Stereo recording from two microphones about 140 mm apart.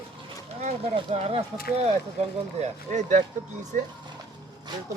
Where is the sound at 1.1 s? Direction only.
50° right (ahead or behind).